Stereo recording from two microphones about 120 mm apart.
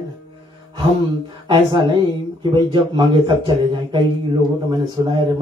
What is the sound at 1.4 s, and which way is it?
Speech, 40° right (ahead or behind).